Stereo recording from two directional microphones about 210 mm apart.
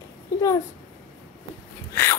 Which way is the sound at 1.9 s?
10° left (ahead or behind).